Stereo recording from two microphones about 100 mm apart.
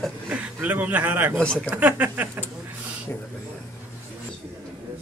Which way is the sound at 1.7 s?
15° right (ahead or behind).